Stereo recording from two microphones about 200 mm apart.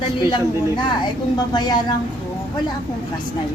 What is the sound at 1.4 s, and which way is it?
Speech, 20° left (ahead or behind).